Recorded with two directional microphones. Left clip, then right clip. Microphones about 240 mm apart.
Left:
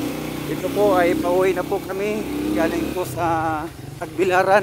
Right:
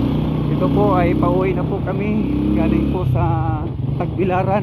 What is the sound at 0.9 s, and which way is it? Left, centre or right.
Speech, left.